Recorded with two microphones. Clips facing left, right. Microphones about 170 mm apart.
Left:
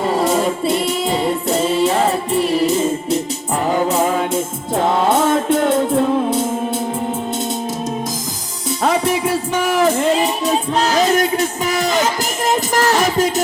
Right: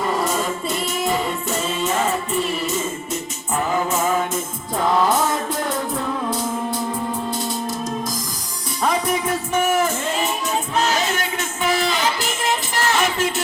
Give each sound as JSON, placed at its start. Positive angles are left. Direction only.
{"t": 0.1, "sound": "music", "side_deg": 35}
{"t": 8.8, "sound": "music", "side_deg": 30}
{"t": 9.5, "sound": "music", "side_deg": 75}
{"t": 9.9, "sound": "music", "side_deg": 35}